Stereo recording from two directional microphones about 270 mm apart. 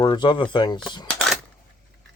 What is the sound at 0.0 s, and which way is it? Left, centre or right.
Speech, centre.